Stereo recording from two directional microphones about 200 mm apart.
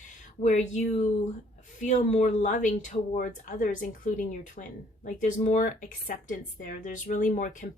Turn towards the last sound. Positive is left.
turn(degrees=40)  # may be behind; listen again after turning